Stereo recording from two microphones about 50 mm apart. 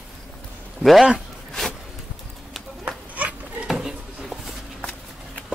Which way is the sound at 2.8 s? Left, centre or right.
Right.